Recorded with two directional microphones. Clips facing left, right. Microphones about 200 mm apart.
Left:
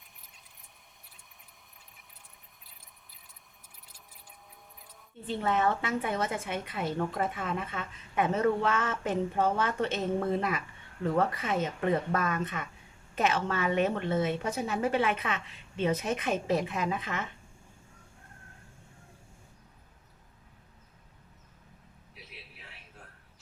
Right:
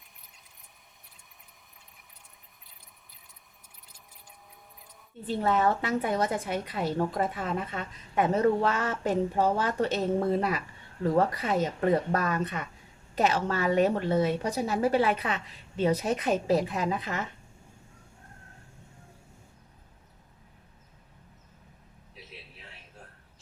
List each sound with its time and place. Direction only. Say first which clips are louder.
5.2 s a woman's voice: right 3 dB; 35° right (ahead or behind)